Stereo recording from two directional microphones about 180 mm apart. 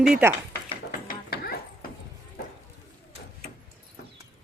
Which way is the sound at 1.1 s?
60° left (ahead or behind).